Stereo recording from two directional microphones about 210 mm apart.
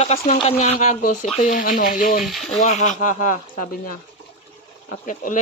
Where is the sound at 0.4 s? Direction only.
30° left (ahead or behind).